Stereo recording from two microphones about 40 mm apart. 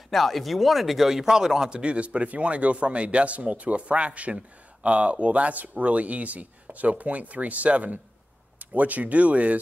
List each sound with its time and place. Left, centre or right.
0.1 s speech: centre; by 9.6 s right